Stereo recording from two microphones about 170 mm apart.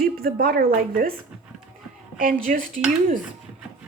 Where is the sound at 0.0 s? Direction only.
60° right (ahead or behind).